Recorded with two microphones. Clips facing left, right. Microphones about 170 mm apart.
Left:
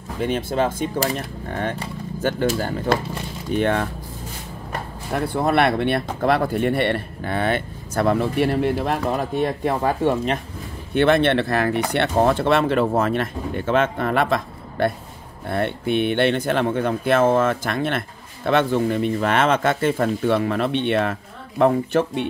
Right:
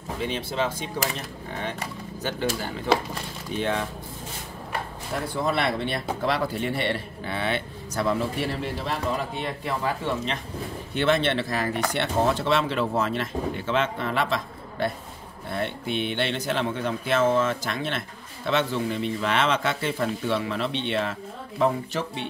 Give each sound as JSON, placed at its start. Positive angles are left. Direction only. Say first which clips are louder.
{"t": 0.2, "sound": "speech", "louder": "left 7 dB", "side_deg": 50}
{"t": 5.1, "sound": "speech", "louder": "left 6 dB", "side_deg": 60}
{"t": 9.1, "sound": "speech", "louder": "left 7 dB", "side_deg": 45}